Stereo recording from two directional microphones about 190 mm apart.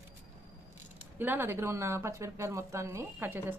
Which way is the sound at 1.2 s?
10° right (ahead or behind).